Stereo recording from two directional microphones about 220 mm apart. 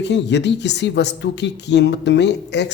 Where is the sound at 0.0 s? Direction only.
50° left (ahead or behind).